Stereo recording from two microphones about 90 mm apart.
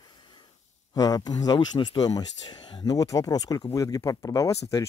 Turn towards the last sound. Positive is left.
turn(degrees=40)  # may be behind; listen again after turning